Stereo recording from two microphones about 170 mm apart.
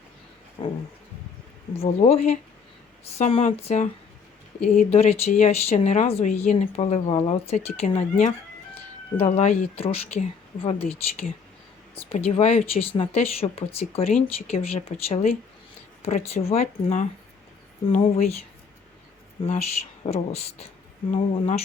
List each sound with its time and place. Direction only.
1.7 s speech: 35° left (ahead or behind)
19.4 s speech: 35° left (ahead or behind)